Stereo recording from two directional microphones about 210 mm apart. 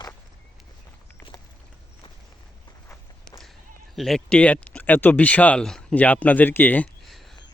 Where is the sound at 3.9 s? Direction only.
Centre (ahead or behind).